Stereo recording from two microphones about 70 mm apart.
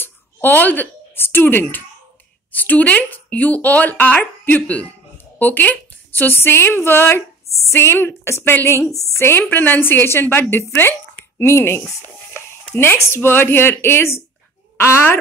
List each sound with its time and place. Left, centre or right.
0.6 s a woman's voice: left
9.4 s a woman's voice: left